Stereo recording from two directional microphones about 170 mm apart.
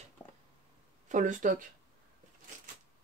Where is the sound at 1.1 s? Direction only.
50° right (ahead or behind).